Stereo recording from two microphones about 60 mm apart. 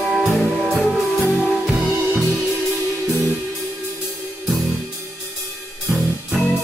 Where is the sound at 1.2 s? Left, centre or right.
Centre.